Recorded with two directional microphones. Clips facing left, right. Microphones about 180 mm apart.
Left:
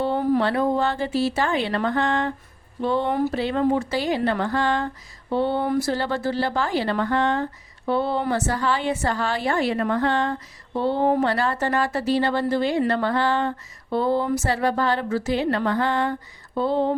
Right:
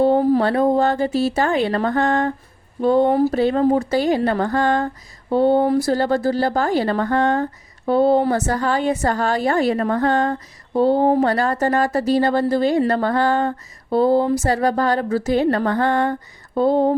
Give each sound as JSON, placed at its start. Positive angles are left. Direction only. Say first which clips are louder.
{"t": 0.0, "sound": "speech", "louder": "right 6 dB", "side_deg": -40}